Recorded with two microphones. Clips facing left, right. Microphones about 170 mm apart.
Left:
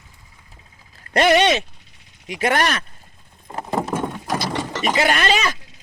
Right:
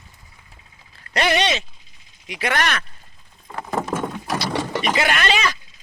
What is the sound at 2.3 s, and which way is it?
Speech, 45° left (ahead or behind).